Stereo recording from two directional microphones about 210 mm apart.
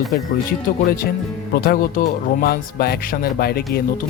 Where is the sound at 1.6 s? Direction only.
45° left (ahead or behind).